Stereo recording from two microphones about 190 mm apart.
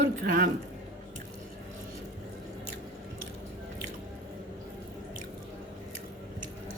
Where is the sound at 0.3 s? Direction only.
45° right (ahead or behind).